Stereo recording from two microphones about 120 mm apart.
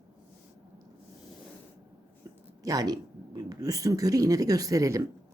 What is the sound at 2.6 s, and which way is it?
Speech, 30° right (ahead or behind).